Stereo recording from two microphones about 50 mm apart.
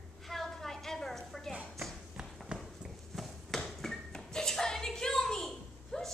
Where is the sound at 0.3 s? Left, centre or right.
Centre.